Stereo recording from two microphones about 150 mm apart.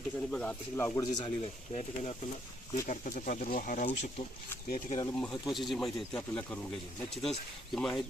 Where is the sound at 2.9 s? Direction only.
60° left (ahead or behind).